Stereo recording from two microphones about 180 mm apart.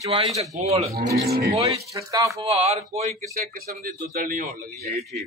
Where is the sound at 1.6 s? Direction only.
20° right (ahead or behind).